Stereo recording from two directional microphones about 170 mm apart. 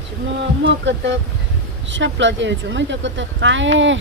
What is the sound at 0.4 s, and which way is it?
Speech, 90° right.